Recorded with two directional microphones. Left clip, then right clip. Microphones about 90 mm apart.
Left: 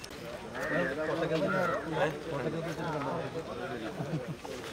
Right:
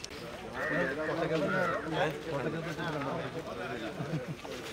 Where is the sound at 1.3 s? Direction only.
5° right (ahead or behind).